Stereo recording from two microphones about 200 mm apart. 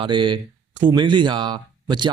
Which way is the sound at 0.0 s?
25° right (ahead or behind).